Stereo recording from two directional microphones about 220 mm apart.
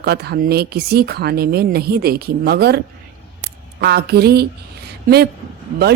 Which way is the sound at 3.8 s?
45° right (ahead or behind).